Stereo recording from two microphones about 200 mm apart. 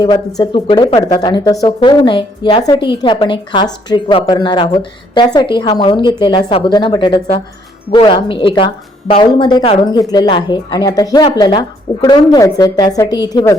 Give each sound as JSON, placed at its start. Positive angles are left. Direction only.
{"t": 0.0, "sound": "a woman's voice", "side_deg": 20}